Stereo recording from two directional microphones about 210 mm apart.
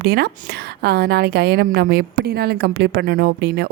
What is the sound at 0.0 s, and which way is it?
A woman's voice, 50° right (ahead or behind).